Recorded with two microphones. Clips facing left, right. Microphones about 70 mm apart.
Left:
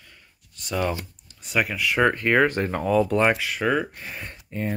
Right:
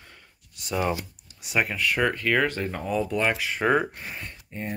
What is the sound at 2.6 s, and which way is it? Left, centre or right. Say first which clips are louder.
Speech: left 6 dB; left.